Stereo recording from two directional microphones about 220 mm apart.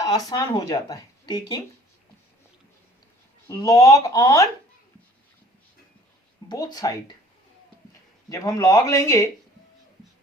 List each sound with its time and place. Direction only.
0.0 s speech: 15° left (ahead or behind)
3.5 s speech: 15° left (ahead or behind)
6.5 s speech: 15° left (ahead or behind)
8.3 s speech: 15° left (ahead or behind)